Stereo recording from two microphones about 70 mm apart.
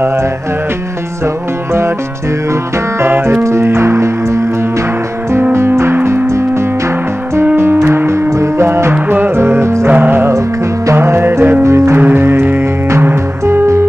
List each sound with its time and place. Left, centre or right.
1.2 s music: right
3.0 s music: right
5.5 s music: right
9.8 s music: right
11.6 s music: right
12.0 s music: right